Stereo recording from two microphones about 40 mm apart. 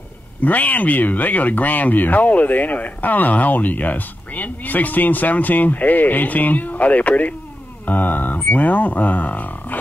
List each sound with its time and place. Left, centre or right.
0.4 s speech: left
7.8 s a sound: left
8.5 s speech: left